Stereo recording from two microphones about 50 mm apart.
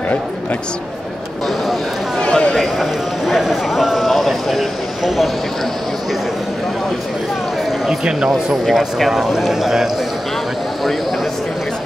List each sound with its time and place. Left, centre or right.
2.1 s a sound: centre
2.5 s speech: centre
8.6 s speech: centre